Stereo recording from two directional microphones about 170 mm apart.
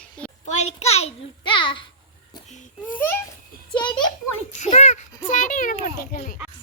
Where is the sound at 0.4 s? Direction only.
40° left (ahead or behind).